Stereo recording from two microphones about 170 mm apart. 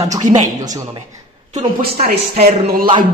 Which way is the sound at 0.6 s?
20° right (ahead or behind).